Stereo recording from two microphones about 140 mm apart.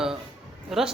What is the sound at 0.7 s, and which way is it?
Speech, 5° right (ahead or behind).